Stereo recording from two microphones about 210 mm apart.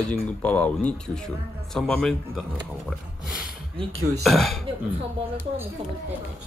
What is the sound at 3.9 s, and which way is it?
Speech, 75° right (ahead or behind).